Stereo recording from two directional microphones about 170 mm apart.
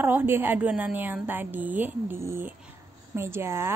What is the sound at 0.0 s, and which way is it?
A woman's voice, 10° right (ahead or behind).